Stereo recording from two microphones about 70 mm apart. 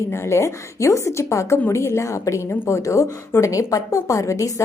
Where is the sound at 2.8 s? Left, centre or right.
Left.